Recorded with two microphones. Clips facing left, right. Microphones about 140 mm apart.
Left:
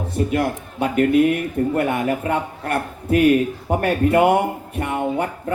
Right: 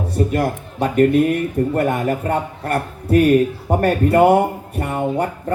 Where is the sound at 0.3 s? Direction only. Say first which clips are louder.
Right 1 dB; 40° right (ahead or behind).